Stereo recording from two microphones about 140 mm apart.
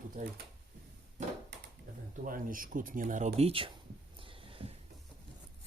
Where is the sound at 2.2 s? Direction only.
80° right; by 3.5 s 60° right (ahead or behind).